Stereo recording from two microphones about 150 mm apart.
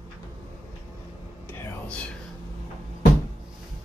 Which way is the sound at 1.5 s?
10° left (ahead or behind).